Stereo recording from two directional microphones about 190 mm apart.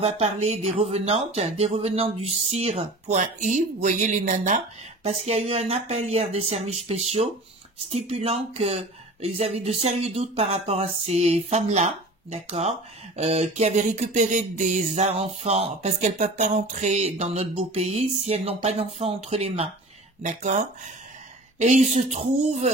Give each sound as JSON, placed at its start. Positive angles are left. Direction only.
{"t": 0.0, "sound": "speech", "side_deg": -35}